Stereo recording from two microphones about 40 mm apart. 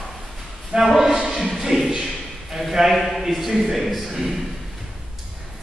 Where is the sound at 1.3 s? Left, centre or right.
Centre.